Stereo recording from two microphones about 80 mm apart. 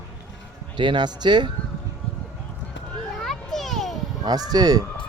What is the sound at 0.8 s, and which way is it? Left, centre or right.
Speech, right.